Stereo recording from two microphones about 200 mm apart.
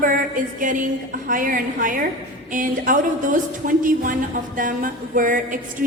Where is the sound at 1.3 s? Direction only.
45° right (ahead or behind).